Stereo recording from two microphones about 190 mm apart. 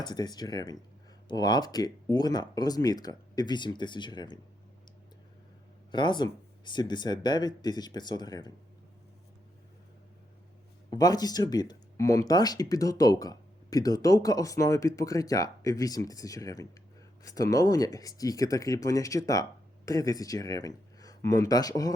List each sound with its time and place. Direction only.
0.0 s speech: 20° left (ahead or behind)
5.9 s speech: 25° left (ahead or behind)
10.9 s speech: 20° left (ahead or behind)